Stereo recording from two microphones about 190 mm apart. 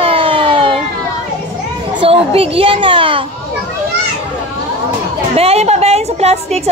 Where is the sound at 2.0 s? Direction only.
30° right (ahead or behind).